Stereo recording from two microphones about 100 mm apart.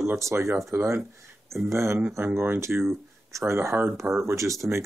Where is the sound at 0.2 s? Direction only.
25° right (ahead or behind).